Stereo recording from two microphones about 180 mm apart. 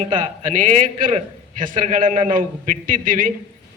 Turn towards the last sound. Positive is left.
turn(degrees=-50)  # may be behind; listen again after turning